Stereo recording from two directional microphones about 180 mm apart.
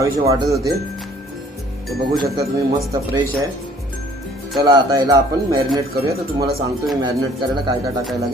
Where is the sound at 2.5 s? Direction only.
20° right (ahead or behind).